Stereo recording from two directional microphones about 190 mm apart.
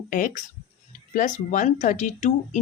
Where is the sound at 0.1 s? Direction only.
45° left (ahead or behind).